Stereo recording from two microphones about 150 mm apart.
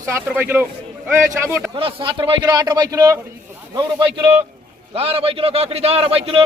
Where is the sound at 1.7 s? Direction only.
35° right (ahead or behind).